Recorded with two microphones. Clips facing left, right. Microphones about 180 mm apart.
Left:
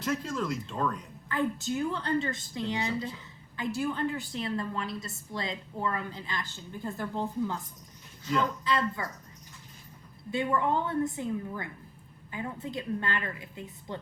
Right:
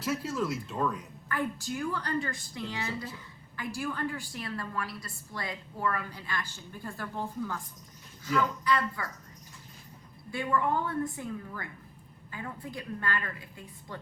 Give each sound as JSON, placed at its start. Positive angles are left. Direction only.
{"t": 0.0, "sound": "speech", "side_deg": -5}
{"t": 1.3, "sound": "a woman's voice", "side_deg": 20}
{"t": 10.3, "sound": "a woman's voice", "side_deg": 20}